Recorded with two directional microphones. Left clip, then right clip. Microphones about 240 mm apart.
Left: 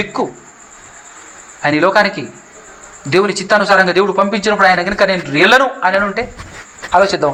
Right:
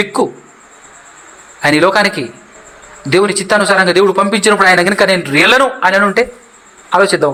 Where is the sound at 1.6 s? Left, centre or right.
Right.